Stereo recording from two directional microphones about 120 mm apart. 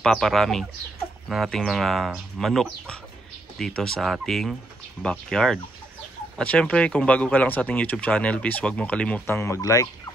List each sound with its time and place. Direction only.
0.0 s speech: centre (ahead or behind)
9.2 s speech: 20° left (ahead or behind)